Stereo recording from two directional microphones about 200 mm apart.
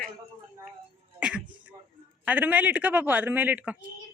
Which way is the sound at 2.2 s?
10° right (ahead or behind).